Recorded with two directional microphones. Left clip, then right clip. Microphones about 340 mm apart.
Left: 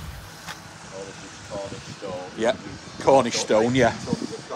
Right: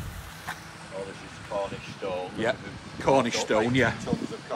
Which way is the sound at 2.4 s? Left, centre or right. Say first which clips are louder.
Left 8 dB; centre.